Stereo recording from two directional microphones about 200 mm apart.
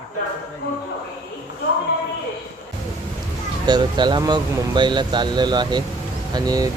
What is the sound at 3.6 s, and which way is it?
Speech, 20° right (ahead or behind).